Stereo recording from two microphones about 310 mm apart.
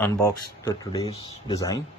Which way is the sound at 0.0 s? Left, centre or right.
Centre.